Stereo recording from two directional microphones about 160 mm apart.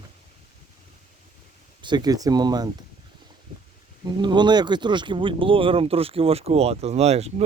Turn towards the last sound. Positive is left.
turn(degrees=-40)  # may be behind; listen again after turning